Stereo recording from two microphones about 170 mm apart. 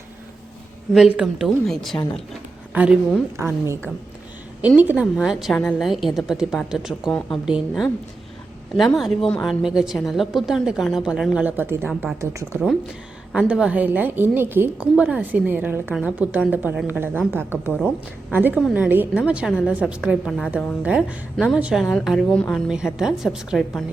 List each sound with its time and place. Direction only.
0.9 s a woman's voice: centre (ahead or behind)
4.8 s a woman's voice: 10° right (ahead or behind)
13.3 s a woman's voice: 5° right (ahead or behind)